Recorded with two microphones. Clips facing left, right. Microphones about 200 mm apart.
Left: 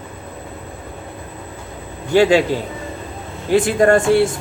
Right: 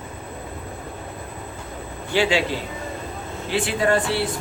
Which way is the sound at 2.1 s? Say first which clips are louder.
Left 8 dB; 45° left (ahead or behind).